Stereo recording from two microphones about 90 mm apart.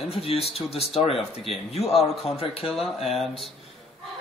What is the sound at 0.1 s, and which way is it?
Speech, 90° left.